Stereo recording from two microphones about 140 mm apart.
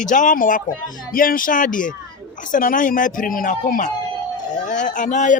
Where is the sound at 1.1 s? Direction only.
85° left.